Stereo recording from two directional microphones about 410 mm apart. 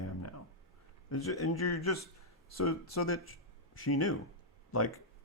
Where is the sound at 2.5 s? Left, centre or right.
Left.